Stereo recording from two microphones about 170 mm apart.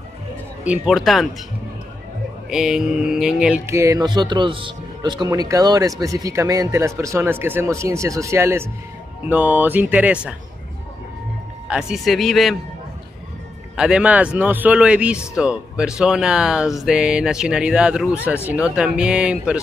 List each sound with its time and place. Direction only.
0.7 s speech: centre (ahead or behind)
2.5 s speech: 5° right (ahead or behind)
11.6 s speech: 5° right (ahead or behind)
13.7 s speech: 5° right (ahead or behind)